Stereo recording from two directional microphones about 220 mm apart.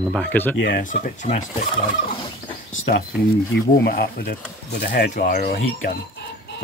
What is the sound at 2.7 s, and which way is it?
Speech, 60° left (ahead or behind).